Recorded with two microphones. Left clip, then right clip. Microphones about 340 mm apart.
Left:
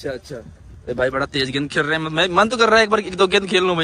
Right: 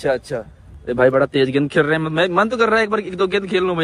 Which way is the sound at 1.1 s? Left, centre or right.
Centre.